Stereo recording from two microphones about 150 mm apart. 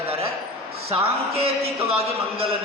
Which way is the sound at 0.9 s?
40° right (ahead or behind).